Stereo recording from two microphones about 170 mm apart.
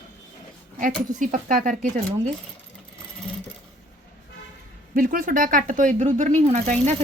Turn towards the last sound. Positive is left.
turn(degrees=-40)  # may be behind; listen again after turning